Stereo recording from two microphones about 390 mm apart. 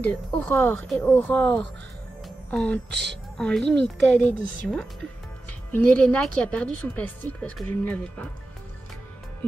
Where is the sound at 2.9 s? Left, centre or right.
Right.